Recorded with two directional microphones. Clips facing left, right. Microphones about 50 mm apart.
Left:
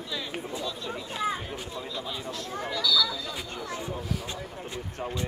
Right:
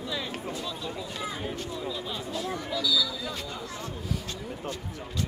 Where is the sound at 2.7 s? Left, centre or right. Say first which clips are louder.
Left 2 dB; centre.